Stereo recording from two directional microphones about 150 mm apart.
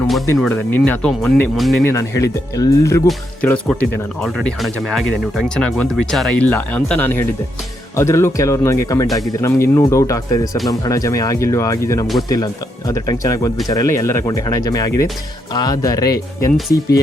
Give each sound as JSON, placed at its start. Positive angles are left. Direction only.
{"t": 0.3, "sound": "speech", "side_deg": 10}
{"t": 1.8, "sound": "speech", "side_deg": 20}